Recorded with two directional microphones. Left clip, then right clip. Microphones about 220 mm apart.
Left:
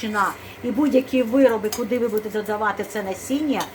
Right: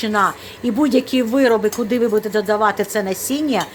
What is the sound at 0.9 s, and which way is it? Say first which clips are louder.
Speech: right 2 dB; 40° right (ahead or behind).